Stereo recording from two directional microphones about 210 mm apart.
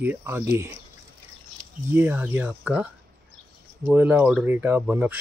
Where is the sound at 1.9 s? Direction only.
10° right (ahead or behind).